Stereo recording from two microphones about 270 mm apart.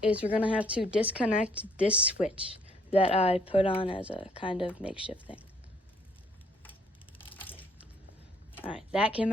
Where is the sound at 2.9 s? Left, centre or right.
Left.